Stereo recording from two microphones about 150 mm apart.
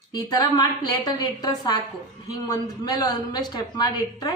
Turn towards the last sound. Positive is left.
turn(degrees=25)  # may be behind; listen again after turning